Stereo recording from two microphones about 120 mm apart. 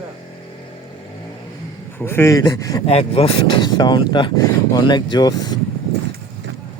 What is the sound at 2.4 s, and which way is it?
Speech, 30° left (ahead or behind).